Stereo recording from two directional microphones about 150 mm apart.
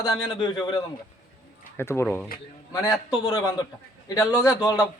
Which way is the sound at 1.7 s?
15° left (ahead or behind).